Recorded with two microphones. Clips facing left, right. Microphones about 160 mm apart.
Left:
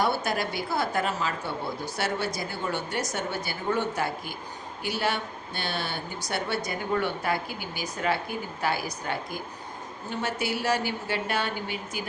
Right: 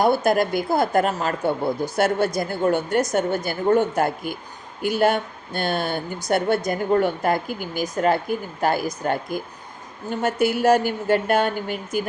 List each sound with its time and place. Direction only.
0.0 s speech: 50° right (ahead or behind)